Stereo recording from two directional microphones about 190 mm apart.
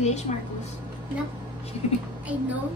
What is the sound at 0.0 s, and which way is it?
Speech, 35° left (ahead or behind).